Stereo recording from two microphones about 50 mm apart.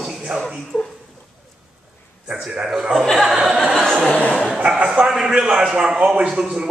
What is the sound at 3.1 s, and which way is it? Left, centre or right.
Speech, centre.